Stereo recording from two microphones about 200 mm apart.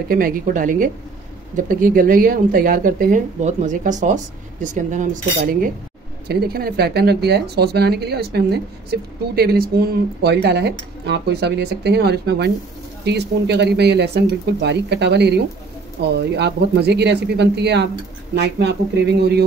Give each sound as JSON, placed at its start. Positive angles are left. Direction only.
{"t": 0.1, "sound": "a woman's voice", "side_deg": -45}